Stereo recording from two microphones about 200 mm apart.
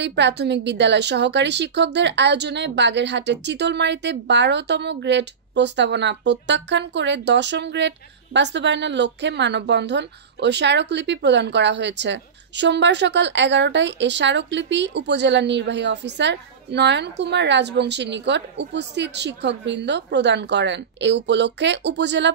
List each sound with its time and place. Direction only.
0.0 s a woman's voice: 60° right (ahead or behind)